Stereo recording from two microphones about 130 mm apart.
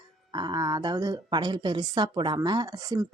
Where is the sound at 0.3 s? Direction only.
35° right (ahead or behind).